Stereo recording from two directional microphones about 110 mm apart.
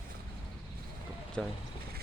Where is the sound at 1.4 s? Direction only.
5° left (ahead or behind).